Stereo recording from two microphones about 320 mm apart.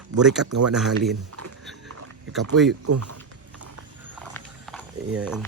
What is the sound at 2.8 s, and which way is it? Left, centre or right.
Speech, right.